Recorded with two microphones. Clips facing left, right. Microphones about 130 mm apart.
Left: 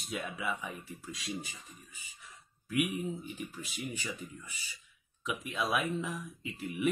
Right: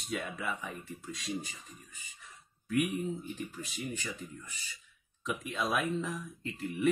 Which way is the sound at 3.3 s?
10° left (ahead or behind).